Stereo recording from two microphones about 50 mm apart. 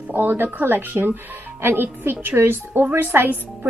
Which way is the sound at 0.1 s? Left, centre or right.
Right.